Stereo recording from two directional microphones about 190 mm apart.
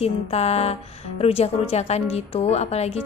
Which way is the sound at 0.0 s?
35° left (ahead or behind).